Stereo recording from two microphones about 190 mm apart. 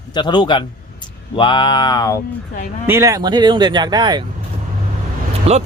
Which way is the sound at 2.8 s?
15° right (ahead or behind).